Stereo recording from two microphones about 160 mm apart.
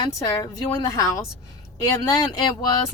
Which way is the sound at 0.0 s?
25° left (ahead or behind).